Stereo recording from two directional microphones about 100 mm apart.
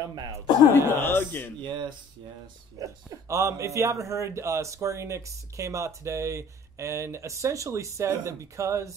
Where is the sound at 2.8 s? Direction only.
35° right (ahead or behind).